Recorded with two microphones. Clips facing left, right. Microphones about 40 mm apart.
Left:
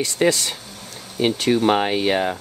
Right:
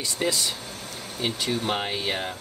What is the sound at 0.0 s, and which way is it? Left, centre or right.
Speech, left.